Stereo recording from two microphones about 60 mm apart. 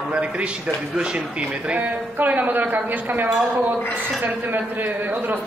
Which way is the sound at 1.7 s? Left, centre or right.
Right.